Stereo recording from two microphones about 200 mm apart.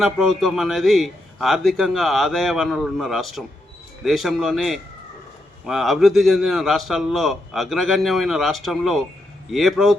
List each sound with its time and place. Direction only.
0.0 s a man's voice: centre (ahead or behind)